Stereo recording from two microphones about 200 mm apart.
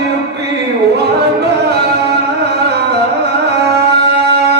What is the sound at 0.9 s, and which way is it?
Music, 55° right (ahead or behind).